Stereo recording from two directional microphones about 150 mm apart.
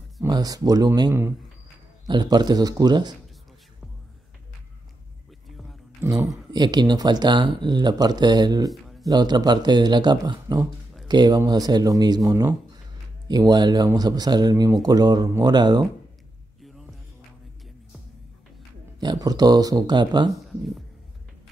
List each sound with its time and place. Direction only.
0.3 s speech: 25° right (ahead or behind)
5.9 s a sound: 20° right (ahead or behind)
6.5 s speech: 30° right (ahead or behind)
16.6 s music: centre (ahead or behind)
18.9 s speech: 25° right (ahead or behind)